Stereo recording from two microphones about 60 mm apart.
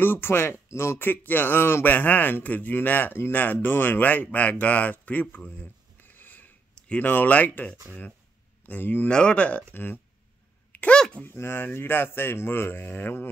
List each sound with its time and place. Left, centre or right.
0.0 s speech: left
9.1 s speech: centre
10.7 s a sound: left
11.0 s speech: centre
11.2 s speech: left